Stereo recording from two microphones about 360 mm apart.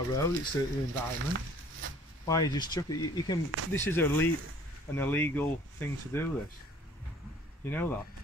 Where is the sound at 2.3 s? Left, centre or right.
Centre.